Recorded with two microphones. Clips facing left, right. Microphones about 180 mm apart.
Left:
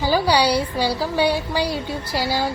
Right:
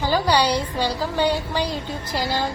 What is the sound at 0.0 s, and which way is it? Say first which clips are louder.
A woman's voice: left 2 dB; 10° left (ahead or behind).